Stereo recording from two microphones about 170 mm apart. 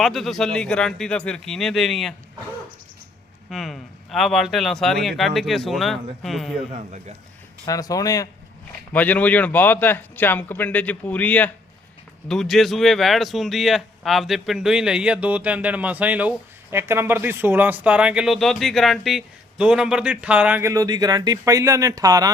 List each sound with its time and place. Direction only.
0.0 s speech: centre (ahead or behind)
3.5 s speech: centre (ahead or behind)
7.6 s speech: 20° left (ahead or behind)
8.9 s a man's voice: 10° left (ahead or behind); by 22.3 s 20° right (ahead or behind)